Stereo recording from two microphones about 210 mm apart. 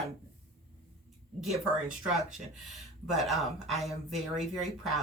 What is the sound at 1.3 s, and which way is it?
Speech, centre (ahead or behind).